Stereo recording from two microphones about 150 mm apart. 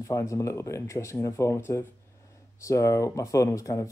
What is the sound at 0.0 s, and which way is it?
Speech, 20° left (ahead or behind).